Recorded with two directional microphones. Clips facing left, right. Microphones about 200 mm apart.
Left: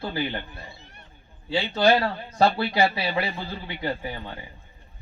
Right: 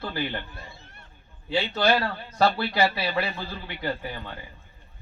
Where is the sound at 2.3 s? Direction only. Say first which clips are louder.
Left 1 dB; 15° left (ahead or behind).